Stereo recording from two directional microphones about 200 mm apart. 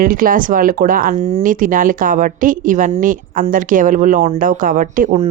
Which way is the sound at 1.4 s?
40° right (ahead or behind).